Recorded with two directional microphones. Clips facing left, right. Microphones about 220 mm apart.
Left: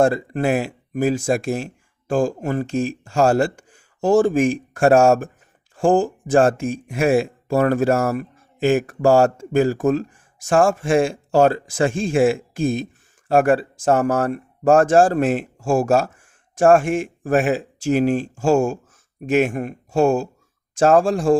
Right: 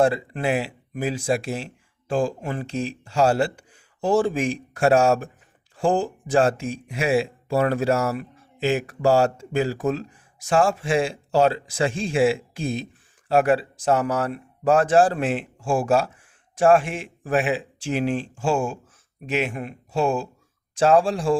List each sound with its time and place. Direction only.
0.0 s speech: 45° left (ahead or behind)